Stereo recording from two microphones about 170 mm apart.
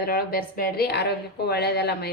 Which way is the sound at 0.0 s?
60° left (ahead or behind).